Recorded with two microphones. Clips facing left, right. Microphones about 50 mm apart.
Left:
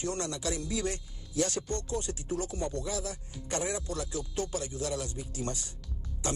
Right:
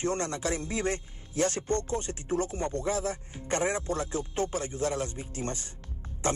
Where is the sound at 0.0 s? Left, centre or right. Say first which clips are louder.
Right 4 dB; right.